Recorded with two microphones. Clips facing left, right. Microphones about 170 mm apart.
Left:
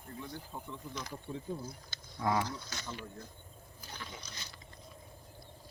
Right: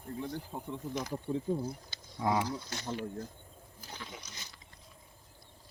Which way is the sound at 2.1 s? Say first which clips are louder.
Right 1 dB; 15° right (ahead or behind).